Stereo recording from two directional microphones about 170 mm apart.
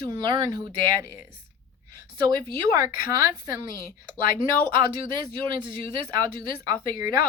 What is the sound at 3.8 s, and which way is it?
Speech, 60° left (ahead or behind).